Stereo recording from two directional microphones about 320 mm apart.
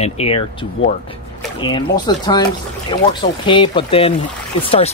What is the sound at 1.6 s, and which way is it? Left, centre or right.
Speech, centre.